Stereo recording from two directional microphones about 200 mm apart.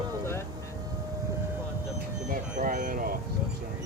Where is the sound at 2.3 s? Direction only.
45° right (ahead or behind).